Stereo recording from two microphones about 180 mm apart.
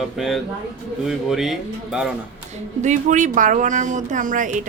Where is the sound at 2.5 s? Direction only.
40° right (ahead or behind).